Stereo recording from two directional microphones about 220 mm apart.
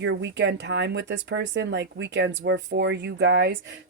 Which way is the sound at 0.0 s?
55° right (ahead or behind).